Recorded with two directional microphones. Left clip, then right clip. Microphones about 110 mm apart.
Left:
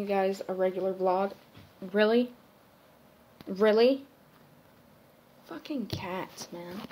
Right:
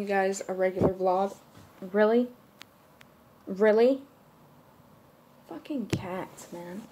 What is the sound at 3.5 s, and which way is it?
Speech, 15° right (ahead or behind).